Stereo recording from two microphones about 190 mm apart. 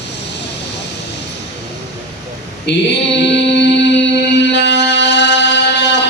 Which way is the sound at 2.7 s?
65° left (ahead or behind).